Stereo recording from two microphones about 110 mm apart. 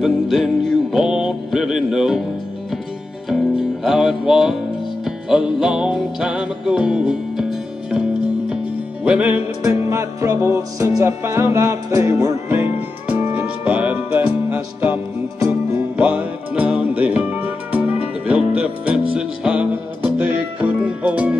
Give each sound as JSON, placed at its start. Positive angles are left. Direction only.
{"t": 0.0, "sound": "music", "side_deg": 0}
{"t": 3.3, "sound": "music", "side_deg": 0}
{"t": 9.0, "sound": "music", "side_deg": -10}
{"t": 9.7, "sound": "music", "side_deg": -25}
{"t": 13.3, "sound": "music", "side_deg": -15}
{"t": 16.0, "sound": "music", "side_deg": -15}